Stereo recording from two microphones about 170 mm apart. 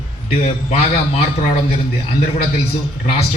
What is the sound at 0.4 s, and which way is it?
Speech, 35° left (ahead or behind).